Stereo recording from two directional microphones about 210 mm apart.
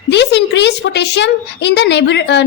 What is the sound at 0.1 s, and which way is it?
A woman's voice, 55° left (ahead or behind).